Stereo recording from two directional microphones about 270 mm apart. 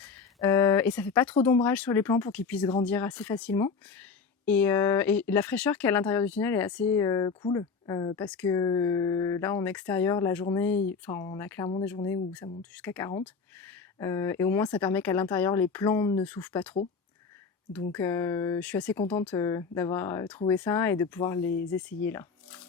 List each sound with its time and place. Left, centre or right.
0.0 s a sound: centre
1.6 s speech: centre
17.9 s speech: centre